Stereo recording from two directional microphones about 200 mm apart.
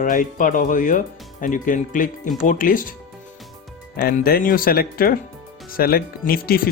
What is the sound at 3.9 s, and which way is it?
Speech, 50° left (ahead or behind).